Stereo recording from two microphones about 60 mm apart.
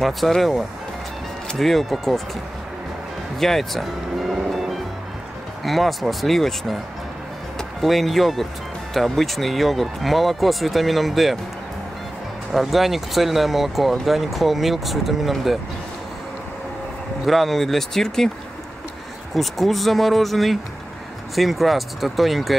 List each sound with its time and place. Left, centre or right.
0.0 s speech: centre
3.3 s music: centre
5.6 s speech: centre
12.5 s speech: centre
17.3 s speech: centre
19.3 s speech: centre